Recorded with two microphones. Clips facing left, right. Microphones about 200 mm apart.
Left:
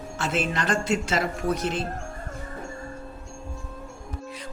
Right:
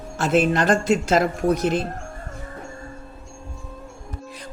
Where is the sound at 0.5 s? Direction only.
50° right (ahead or behind).